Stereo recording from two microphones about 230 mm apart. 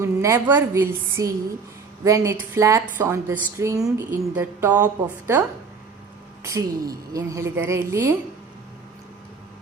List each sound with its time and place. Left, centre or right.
0.0 s a woman's voice: centre
6.4 s a woman's voice: centre